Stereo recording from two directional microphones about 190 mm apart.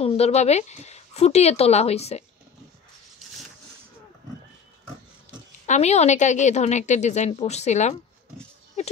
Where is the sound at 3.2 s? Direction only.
Centre (ahead or behind).